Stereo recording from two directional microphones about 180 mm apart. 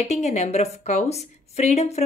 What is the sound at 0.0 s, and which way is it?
A woman's voice, 40° left (ahead or behind).